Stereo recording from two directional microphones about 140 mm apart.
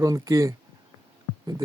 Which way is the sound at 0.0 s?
25° right (ahead or behind).